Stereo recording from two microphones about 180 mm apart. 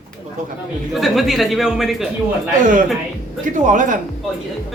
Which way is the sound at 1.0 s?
Centre (ahead or behind).